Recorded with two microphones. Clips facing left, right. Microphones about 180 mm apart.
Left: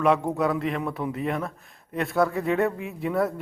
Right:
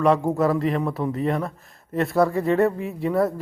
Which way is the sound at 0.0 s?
Centre (ahead or behind).